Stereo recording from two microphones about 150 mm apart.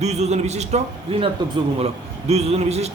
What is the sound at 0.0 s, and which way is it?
Speech, 50° right (ahead or behind).